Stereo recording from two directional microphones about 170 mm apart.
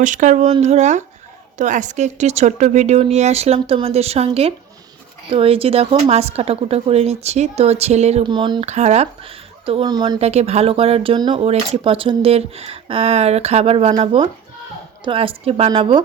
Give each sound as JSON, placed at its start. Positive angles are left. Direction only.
{"t": 0.0, "sound": "speech", "side_deg": -50}
{"t": 8.3, "sound": "speech", "side_deg": -25}
{"t": 8.6, "sound": "speech", "side_deg": -40}
{"t": 10.2, "sound": "speech", "side_deg": -40}